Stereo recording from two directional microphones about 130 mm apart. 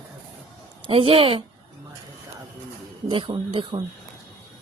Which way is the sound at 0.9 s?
45° right (ahead or behind).